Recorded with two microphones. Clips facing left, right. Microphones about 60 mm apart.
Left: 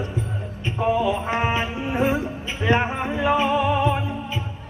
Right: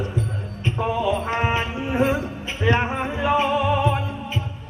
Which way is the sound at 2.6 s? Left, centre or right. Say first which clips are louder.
Even; centre.